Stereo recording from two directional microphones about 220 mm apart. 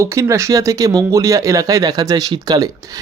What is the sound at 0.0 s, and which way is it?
Speech, 15° right (ahead or behind).